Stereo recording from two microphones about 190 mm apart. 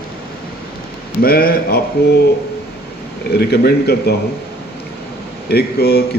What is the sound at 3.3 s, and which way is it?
Speech, 55° left (ahead or behind).